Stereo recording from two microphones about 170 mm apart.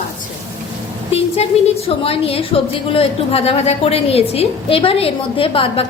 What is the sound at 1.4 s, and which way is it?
A woman's voice, 40° left (ahead or behind).